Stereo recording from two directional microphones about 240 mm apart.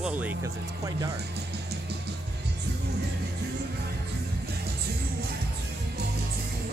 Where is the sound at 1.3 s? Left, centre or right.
Right.